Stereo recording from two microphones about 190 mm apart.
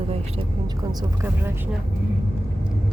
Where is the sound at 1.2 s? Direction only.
10° right (ahead or behind).